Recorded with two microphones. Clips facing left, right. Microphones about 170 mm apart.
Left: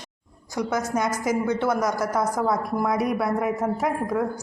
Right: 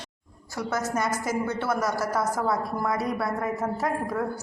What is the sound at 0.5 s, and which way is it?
A woman's voice, 15° left (ahead or behind).